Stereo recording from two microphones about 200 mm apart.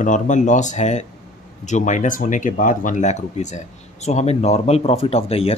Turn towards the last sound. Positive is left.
turn(degrees=30)  # may be behind; listen again after turning